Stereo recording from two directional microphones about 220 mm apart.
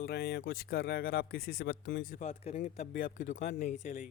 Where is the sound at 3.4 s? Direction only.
55° left (ahead or behind).